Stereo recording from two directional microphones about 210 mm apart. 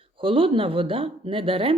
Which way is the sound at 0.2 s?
25° right (ahead or behind).